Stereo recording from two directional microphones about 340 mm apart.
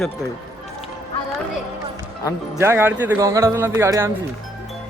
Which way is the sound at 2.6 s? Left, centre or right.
Centre.